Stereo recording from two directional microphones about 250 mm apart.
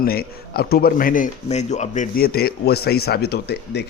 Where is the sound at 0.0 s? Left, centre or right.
Left.